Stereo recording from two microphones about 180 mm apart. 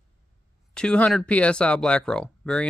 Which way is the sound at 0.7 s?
5° left (ahead or behind).